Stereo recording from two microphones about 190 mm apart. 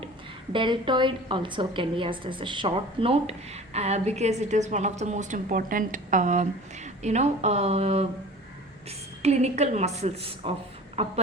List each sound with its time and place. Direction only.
0.5 s a woman's voice: 25° right (ahead or behind)
9.2 s a woman's voice: 35° right (ahead or behind)